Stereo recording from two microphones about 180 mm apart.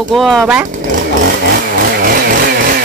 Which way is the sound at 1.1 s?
60° right (ahead or behind).